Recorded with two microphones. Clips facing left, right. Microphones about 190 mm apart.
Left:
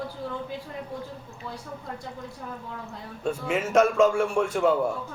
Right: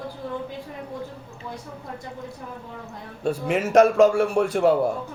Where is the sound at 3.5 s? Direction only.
35° right (ahead or behind).